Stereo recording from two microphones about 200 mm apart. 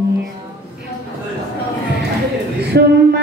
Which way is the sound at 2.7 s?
55° right (ahead or behind).